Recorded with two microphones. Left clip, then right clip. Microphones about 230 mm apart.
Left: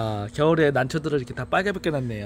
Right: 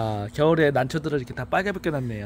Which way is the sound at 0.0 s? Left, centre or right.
Centre.